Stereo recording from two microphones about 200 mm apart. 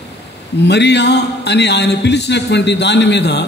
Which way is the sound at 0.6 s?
60° left (ahead or behind).